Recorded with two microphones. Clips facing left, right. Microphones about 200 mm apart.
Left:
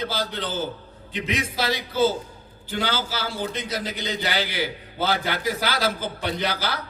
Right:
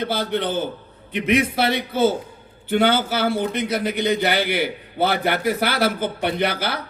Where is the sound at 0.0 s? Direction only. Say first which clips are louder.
Right 6 dB; 55° right (ahead or behind).